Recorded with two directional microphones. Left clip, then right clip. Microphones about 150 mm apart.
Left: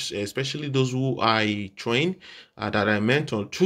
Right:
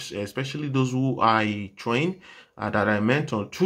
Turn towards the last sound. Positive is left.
turn(degrees=40)  # may be behind; listen again after turning